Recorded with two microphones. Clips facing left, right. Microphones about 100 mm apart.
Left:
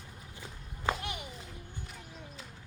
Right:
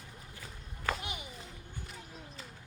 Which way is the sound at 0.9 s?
25° left (ahead or behind).